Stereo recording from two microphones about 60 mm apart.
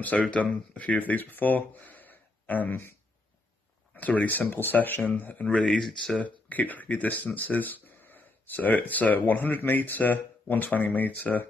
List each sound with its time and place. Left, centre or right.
0.0 s speech: left